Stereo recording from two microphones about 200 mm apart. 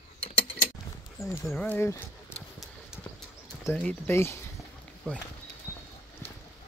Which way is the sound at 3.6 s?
10° left (ahead or behind).